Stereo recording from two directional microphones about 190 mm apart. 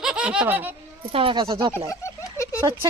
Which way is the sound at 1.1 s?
25° right (ahead or behind).